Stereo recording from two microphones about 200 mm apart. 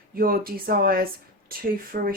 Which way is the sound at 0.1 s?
45° right (ahead or behind).